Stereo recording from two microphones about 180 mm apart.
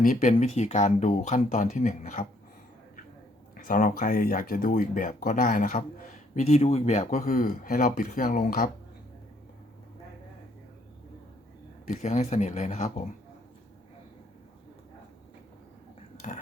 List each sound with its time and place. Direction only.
0.0 s speech: 45° left (ahead or behind)
3.5 s speech: 50° left (ahead or behind)
11.9 s speech: 40° left (ahead or behind)
16.2 s speech: 40° left (ahead or behind)